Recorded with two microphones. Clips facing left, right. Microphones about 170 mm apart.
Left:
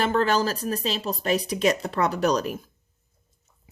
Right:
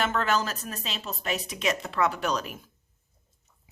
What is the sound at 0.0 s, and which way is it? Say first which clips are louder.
Speech: left 5 dB; 35° left (ahead or behind).